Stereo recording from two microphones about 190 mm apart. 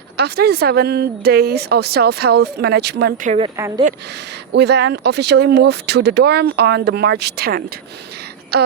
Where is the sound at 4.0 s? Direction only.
60° right (ahead or behind).